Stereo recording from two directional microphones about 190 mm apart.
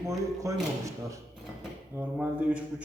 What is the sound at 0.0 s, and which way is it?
Speech, 15° right (ahead or behind).